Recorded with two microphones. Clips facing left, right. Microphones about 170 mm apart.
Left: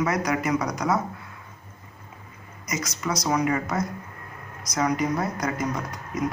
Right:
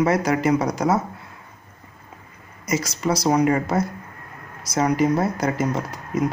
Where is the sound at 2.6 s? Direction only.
30° right (ahead or behind).